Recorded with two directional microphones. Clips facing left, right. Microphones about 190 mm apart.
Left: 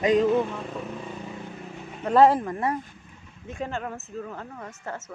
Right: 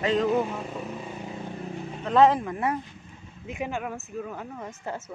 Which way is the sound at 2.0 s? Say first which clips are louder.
Left 2 dB; 5° left (ahead or behind).